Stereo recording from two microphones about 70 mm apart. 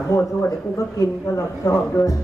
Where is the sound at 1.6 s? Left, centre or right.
Left.